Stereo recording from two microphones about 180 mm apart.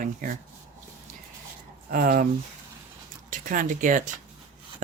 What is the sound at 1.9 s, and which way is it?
Speech, 50° right (ahead or behind).